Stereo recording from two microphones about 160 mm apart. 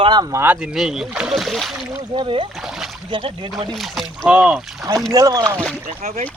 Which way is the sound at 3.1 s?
35° right (ahead or behind).